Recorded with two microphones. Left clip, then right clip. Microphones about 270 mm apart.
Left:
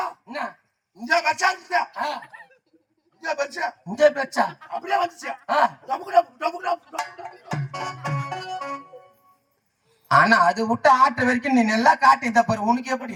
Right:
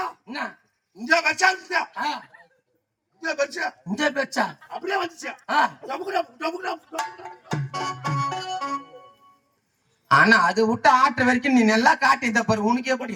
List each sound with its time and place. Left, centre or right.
0.9 s speech: centre
3.2 s speech: centre
6.9 s music: centre
10.1 s speech: centre